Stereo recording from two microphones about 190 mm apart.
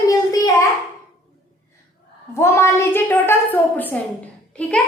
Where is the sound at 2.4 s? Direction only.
15° left (ahead or behind).